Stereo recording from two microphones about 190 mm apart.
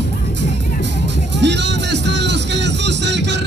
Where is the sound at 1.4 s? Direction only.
65° right (ahead or behind).